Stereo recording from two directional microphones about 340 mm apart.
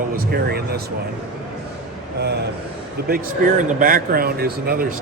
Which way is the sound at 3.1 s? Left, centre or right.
Right.